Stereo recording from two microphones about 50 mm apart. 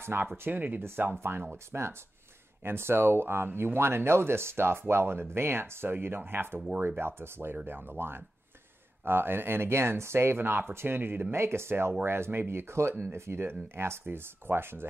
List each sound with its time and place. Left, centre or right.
0.0 s speech: right
0.5 s speech: right
1.7 s speech: right
11.0 s speech: right
11.3 s speech: right
12.9 s speech: right